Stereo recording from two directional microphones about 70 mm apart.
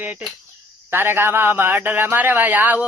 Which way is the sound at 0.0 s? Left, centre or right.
Right.